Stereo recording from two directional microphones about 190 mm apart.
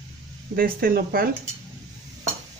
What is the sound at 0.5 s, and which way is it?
Speech, 50° right (ahead or behind).